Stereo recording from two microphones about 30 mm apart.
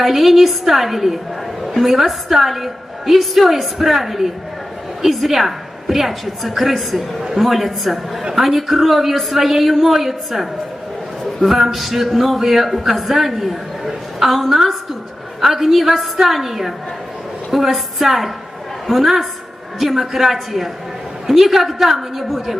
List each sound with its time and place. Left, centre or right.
0.0 s a man's voice: centre
7.2 s a man's voice: centre
7.4 s a man's voice: centre